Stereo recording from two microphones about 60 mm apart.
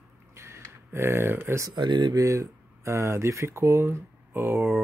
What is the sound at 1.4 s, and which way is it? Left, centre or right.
Speech, right.